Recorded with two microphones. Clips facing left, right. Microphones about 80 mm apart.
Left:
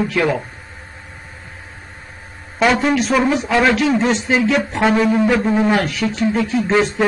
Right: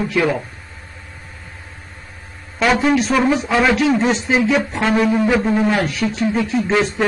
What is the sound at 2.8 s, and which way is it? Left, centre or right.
A man's voice, centre.